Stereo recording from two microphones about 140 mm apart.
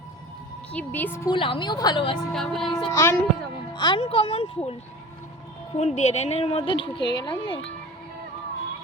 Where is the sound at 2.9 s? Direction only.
20° left (ahead or behind).